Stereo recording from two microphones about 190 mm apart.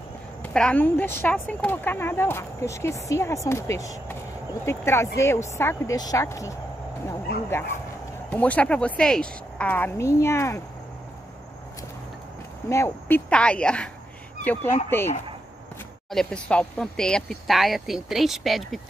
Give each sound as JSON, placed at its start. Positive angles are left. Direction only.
{"t": 0.4, "sound": "speech", "side_deg": 5}
{"t": 8.3, "sound": "speech", "side_deg": 5}
{"t": 12.6, "sound": "speech", "side_deg": 15}